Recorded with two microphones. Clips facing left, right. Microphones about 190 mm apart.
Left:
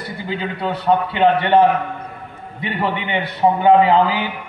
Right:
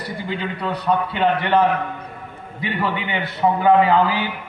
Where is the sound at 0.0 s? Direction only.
30° left (ahead or behind).